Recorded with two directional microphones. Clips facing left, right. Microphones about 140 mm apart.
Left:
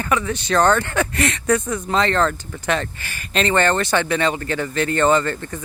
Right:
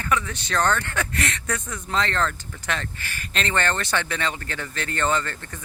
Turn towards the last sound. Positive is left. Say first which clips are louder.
# left 7 dB
turn(degrees=15)  # may be behind; listen again after turning